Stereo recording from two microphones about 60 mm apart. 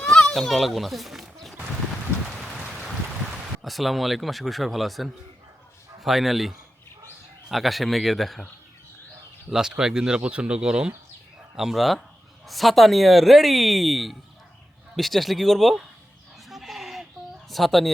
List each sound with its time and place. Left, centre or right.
0.0 s children playing: centre
0.3 s speech: centre
3.6 s speech: centre
9.5 s speech: centre
11.5 s speech: centre
16.5 s goat: centre
17.5 s speech: centre